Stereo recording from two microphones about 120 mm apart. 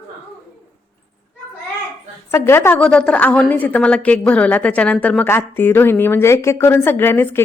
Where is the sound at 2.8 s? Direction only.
10° left (ahead or behind).